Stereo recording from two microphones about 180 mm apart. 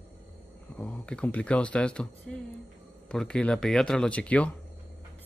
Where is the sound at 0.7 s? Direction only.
5° left (ahead or behind).